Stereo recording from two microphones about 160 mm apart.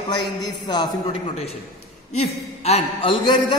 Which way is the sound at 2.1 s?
40° left (ahead or behind).